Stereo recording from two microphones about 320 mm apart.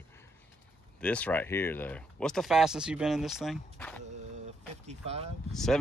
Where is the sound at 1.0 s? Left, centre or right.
Centre.